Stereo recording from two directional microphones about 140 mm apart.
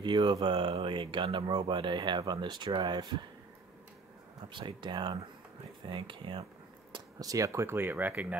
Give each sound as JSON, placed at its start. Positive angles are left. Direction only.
{"t": 0.0, "sound": "speech", "side_deg": -35}
{"t": 4.5, "sound": "speech", "side_deg": -35}
{"t": 6.9, "sound": "speech", "side_deg": -25}